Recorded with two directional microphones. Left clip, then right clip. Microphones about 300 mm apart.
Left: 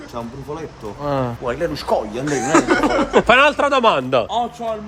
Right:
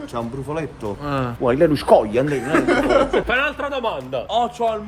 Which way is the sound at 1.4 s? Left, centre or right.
Right.